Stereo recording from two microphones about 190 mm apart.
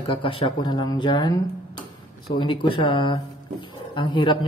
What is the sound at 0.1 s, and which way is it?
Speech, 30° left (ahead or behind).